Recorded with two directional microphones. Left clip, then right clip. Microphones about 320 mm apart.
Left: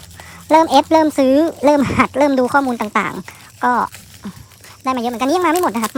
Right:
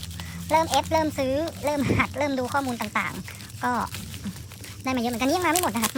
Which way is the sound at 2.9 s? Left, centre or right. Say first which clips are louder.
Left 9 dB; centre.